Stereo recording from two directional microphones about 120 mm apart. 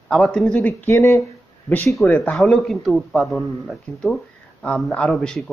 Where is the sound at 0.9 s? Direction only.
25° left (ahead or behind).